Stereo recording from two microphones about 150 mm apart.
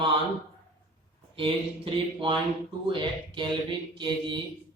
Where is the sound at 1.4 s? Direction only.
35° right (ahead or behind).